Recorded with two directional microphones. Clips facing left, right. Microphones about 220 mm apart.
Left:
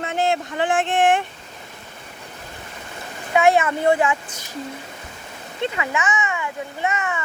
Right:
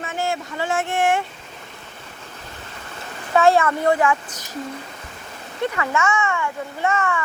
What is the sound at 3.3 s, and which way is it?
Speech, 15° left (ahead or behind).